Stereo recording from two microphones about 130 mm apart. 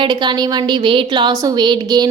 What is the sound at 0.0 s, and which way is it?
A woman's voice, 35° right (ahead or behind).